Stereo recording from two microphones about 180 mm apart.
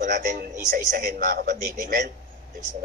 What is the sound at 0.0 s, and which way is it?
A man's voice, 50° right (ahead or behind).